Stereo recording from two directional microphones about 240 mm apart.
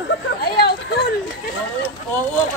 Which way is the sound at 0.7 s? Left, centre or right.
Left.